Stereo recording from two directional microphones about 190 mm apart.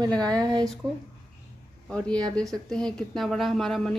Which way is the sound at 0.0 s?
20° right (ahead or behind).